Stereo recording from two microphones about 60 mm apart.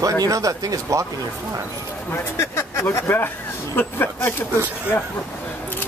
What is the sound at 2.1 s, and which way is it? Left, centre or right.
Speech, left.